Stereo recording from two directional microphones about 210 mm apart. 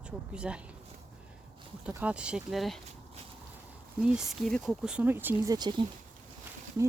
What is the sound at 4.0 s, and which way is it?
Speech, centre (ahead or behind).